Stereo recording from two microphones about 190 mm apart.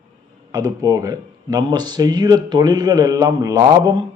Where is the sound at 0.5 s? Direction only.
20° right (ahead or behind).